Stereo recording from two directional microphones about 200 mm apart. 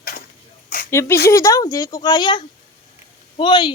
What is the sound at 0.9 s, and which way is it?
Speech, 15° left (ahead or behind).